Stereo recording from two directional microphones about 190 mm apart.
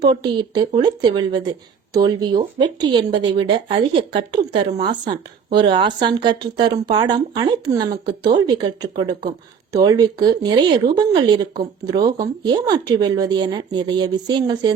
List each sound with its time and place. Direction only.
0.0 s speech: 25° right (ahead or behind)